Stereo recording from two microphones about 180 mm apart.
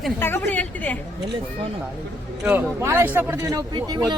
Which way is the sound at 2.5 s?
10° right (ahead or behind).